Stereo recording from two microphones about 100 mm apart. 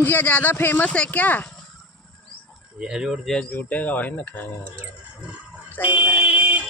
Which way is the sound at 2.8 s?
5° right (ahead or behind).